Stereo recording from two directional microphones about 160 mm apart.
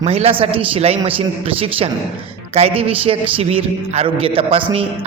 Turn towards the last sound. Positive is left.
turn(degrees=-35)  # may be behind; listen again after turning